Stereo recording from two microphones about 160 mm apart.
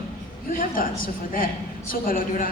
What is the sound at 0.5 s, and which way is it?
A woman's voice, 60° left (ahead or behind).